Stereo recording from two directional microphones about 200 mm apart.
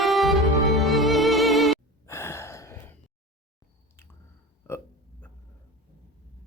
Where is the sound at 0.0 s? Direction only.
Centre (ahead or behind).